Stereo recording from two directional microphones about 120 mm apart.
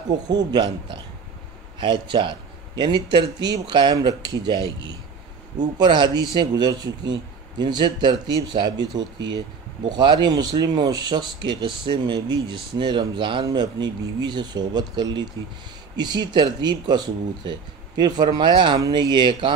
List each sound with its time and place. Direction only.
0.3 s speech: 35° right (ahead or behind)
5.6 s speech: 35° right (ahead or behind)